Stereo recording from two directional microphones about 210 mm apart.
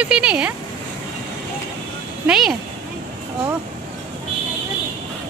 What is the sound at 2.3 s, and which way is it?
Speech, centre (ahead or behind).